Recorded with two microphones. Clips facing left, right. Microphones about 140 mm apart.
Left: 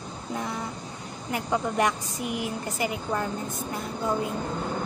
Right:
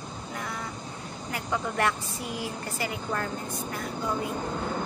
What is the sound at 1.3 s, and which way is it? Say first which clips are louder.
A woman's voice: left 4 dB; 20° left (ahead or behind).